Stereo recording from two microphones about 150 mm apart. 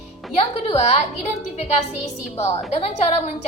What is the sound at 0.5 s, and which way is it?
A woman's voice, 45° left (ahead or behind).